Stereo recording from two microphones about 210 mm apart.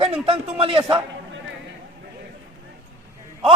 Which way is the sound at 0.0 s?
30° right (ahead or behind).